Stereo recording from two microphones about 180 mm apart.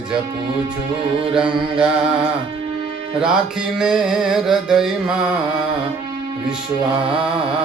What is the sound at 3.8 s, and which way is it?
Music, 5° right (ahead or behind).